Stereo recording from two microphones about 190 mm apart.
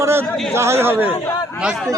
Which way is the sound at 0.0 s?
15° right (ahead or behind).